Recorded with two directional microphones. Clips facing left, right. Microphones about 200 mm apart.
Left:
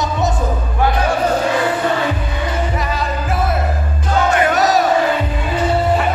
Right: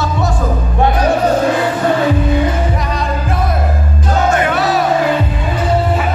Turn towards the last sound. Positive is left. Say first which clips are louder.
# even
turn(degrees=40)  # may be behind; listen again after turning